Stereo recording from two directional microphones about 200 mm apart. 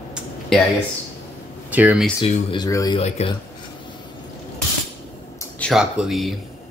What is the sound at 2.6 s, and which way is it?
Speech, 20° left (ahead or behind).